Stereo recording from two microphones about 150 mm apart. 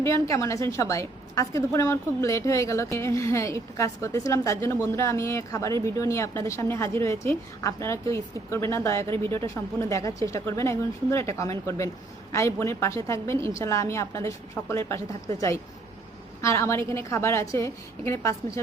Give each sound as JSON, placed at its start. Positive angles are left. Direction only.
{"t": 0.0, "sound": "a woman's voice", "side_deg": 20}
{"t": 16.4, "sound": "a woman's voice", "side_deg": 20}